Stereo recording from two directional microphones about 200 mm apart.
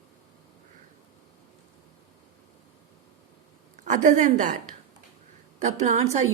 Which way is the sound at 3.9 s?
40° right (ahead or behind).